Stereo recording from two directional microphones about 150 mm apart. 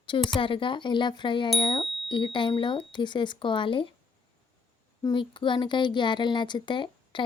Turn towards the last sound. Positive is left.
turn(degrees=30)  # may be behind; listen again after turning